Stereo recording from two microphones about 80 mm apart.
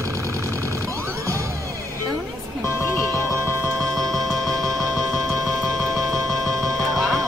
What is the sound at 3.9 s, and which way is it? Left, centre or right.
Music, centre.